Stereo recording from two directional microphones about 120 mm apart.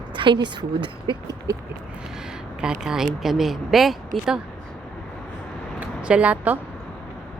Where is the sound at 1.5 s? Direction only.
30° right (ahead or behind).